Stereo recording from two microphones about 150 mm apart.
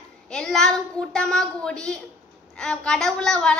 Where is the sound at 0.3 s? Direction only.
5° left (ahead or behind).